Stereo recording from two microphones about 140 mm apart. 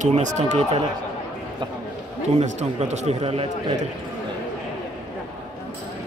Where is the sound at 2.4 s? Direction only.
55° right (ahead or behind).